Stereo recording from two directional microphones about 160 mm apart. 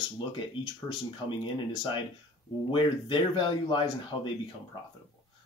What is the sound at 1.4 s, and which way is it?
Speech, 25° left (ahead or behind).